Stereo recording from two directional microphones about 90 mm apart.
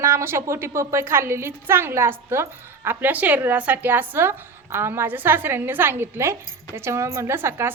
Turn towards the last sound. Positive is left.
turn(degrees=-25)  # may be behind; listen again after turning